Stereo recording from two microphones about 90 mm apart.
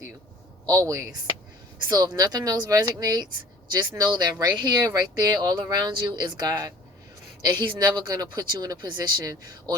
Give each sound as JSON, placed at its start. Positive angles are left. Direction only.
{"t": 0.6, "sound": "a man's voice", "side_deg": -40}